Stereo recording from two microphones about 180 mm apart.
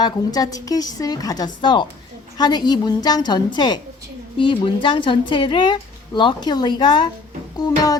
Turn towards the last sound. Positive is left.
turn(degrees=20)  # may be behind; listen again after turning